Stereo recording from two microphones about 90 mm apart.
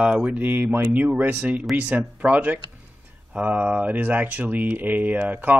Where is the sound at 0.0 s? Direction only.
15° right (ahead or behind).